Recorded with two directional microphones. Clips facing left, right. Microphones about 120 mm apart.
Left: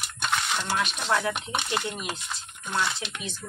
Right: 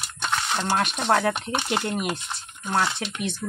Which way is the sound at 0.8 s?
55° right (ahead or behind).